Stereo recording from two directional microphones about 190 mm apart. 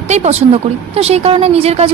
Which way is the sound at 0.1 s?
35° right (ahead or behind).